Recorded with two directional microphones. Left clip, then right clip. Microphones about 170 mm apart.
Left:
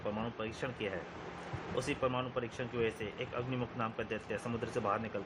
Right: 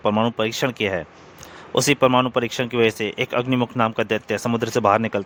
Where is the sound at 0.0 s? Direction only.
90° right.